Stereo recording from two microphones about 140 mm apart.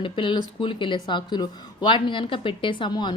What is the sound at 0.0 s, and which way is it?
A woman's voice, 35° left (ahead or behind).